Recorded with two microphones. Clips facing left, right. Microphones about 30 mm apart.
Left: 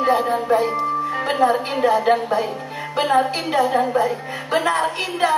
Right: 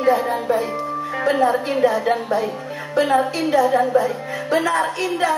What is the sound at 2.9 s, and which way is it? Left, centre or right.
Speech, left.